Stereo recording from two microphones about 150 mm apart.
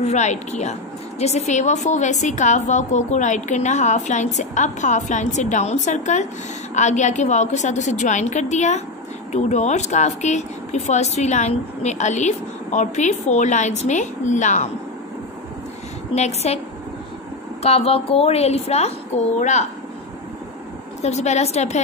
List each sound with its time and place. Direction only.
0.0 s speech: 50° left (ahead or behind)
16.2 s speech: 45° left (ahead or behind)
17.6 s speech: 45° left (ahead or behind)
21.0 s speech: 45° left (ahead or behind)